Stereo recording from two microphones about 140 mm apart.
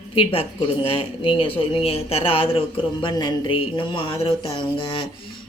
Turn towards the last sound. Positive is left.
turn(degrees=35)  # may be behind; listen again after turning